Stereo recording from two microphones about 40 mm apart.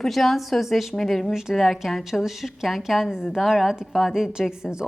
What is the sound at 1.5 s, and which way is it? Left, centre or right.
A woman's voice, centre.